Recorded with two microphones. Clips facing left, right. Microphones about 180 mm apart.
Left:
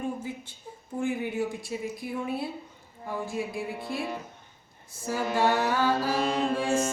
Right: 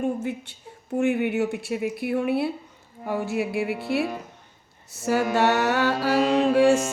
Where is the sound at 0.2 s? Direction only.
70° right (ahead or behind).